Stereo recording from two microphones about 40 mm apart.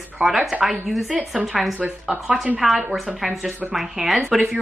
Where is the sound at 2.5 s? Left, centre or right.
Centre.